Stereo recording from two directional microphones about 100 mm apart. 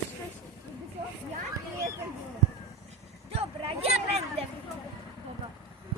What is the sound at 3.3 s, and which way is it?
Speech, 85° right.